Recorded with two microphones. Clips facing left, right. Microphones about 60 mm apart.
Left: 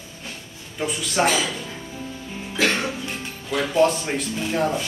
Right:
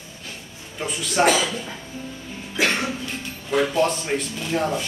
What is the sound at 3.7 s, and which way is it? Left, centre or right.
Speech, centre.